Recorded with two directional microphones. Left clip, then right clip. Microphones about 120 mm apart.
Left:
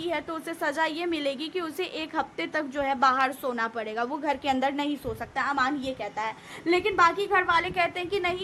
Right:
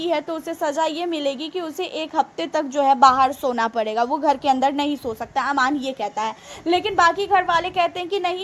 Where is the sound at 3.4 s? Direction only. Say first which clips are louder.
Right 8 dB; 55° right (ahead or behind).